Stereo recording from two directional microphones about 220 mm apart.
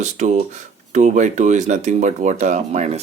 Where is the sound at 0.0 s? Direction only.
30° right (ahead or behind).